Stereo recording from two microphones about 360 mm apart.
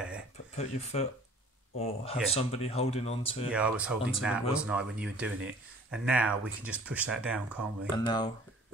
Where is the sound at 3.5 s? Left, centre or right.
Centre.